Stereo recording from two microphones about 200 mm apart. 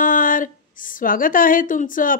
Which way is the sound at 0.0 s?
45° left (ahead or behind).